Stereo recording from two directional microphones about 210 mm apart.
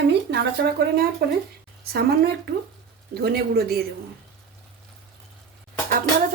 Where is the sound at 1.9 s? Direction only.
50° right (ahead or behind).